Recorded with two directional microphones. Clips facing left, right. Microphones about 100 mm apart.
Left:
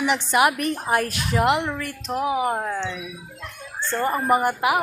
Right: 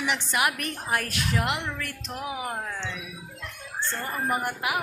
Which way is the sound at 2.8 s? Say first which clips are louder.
Left 6 dB; 20° left (ahead or behind).